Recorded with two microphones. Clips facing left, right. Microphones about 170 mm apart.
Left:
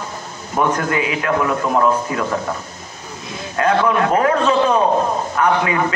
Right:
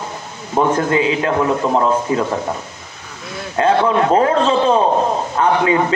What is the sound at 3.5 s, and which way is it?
A man's voice, 25° right (ahead or behind).